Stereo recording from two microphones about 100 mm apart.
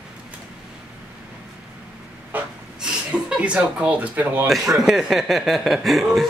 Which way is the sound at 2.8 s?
5° right (ahead or behind).